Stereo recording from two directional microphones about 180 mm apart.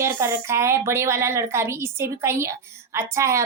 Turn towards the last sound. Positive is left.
turn(degrees=-15)  # may be behind; listen again after turning